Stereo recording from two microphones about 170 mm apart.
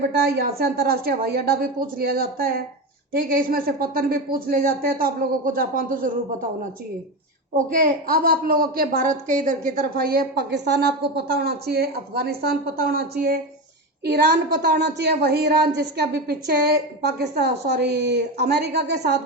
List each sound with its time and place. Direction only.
0.3 s a woman's voice: 65° right (ahead or behind)
7.5 s a woman's voice: 55° right (ahead or behind); by 19.2 s 75° right (ahead or behind)